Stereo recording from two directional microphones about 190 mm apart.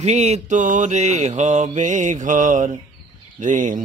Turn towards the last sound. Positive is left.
turn(degrees=-40)  # may be behind; listen again after turning